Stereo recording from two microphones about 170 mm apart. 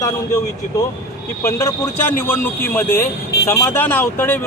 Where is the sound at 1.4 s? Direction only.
15° left (ahead or behind).